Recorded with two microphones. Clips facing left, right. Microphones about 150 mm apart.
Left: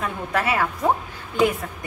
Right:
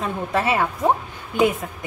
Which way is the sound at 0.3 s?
25° right (ahead or behind).